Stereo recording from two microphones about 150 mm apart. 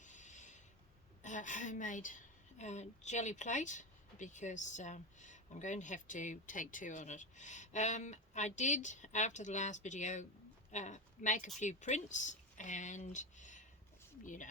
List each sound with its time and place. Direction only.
0.0 s filing: 55° left (ahead or behind)
1.2 s a woman's voice: 55° left (ahead or behind)